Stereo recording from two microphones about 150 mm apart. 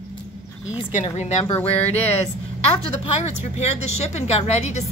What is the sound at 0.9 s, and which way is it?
A woman's voice, 50° left (ahead or behind).